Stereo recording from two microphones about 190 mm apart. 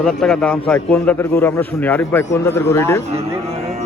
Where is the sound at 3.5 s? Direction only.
35° right (ahead or behind).